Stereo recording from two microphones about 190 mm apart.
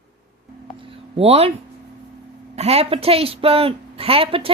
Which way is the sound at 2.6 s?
30° right (ahead or behind).